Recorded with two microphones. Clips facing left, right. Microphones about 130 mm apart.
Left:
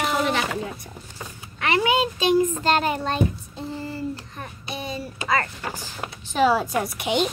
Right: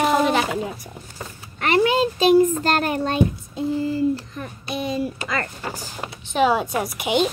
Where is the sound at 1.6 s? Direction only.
35° right (ahead or behind).